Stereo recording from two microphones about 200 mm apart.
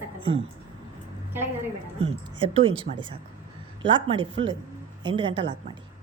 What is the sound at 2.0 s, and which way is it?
A woman's voice, 30° right (ahead or behind).